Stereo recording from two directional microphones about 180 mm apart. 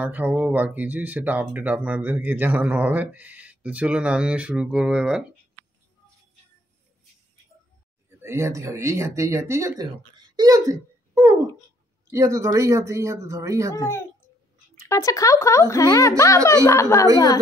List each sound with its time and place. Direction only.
0.0 s speech: 10° right (ahead or behind)
8.2 s speech: 15° right (ahead or behind)
10.3 s a sound: 20° right (ahead or behind)
12.1 s speech: 15° right (ahead or behind)
13.7 s a woman's voice: 15° left (ahead or behind)